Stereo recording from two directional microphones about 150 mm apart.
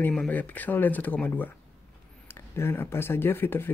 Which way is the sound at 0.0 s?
10° left (ahead or behind).